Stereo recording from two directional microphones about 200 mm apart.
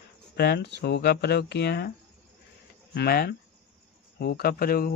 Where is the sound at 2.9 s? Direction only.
50° left (ahead or behind).